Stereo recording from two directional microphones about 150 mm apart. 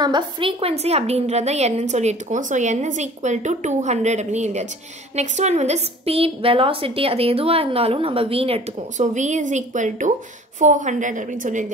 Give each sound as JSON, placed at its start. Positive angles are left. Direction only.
{"t": 0.0, "sound": "a woman's voice", "side_deg": -30}
{"t": 8.9, "sound": "a woman's voice", "side_deg": -55}